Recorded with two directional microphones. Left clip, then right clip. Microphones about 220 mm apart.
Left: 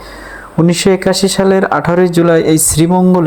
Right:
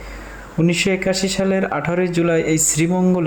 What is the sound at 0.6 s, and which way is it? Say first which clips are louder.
Speech: left 7 dB; 20° left (ahead or behind).